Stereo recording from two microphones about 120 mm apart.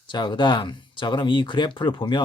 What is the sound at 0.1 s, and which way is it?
Speech, 40° left (ahead or behind).